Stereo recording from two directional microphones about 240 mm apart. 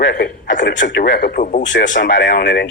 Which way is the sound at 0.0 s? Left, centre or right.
Left.